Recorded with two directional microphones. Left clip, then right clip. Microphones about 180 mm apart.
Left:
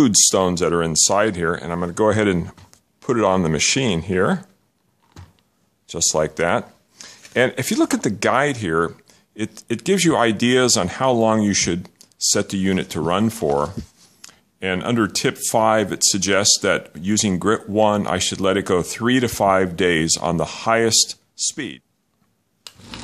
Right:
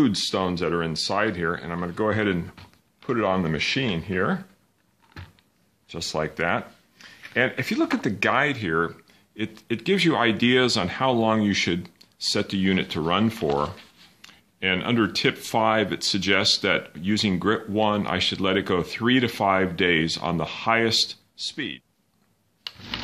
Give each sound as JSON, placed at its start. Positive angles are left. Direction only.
{"t": 0.0, "sound": "speech", "side_deg": 55}
{"t": 5.9, "sound": "speech", "side_deg": 45}
{"t": 22.6, "sound": "a sound", "side_deg": 10}